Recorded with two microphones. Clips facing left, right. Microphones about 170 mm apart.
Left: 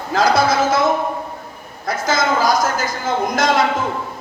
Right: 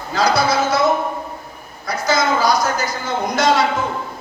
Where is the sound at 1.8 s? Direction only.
50° left (ahead or behind).